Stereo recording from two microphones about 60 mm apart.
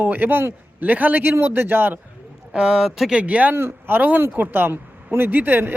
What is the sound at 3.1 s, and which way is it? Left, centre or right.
Speech, right.